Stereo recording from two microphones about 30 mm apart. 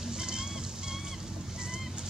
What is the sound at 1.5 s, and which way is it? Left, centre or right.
Fowl, right.